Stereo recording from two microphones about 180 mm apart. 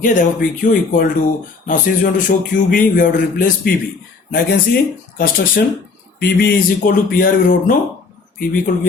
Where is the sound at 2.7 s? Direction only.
50° left (ahead or behind).